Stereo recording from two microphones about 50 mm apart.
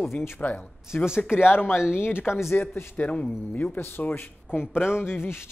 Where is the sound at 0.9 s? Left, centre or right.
Left.